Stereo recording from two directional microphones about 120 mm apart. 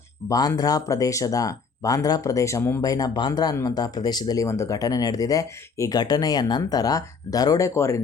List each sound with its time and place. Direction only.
0.3 s speech: 30° left (ahead or behind)